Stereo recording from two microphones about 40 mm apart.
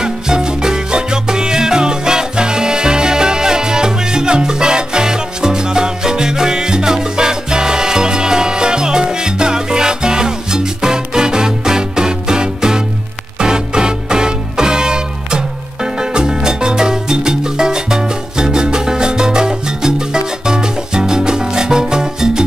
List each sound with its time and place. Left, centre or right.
0.0 s salsa music: centre
13.4 s music: centre